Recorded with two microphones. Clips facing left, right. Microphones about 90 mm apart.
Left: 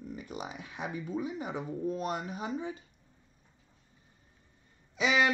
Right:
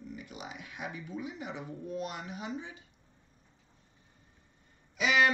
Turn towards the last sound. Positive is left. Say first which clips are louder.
# even
turn(degrees=25)  # may be behind; listen again after turning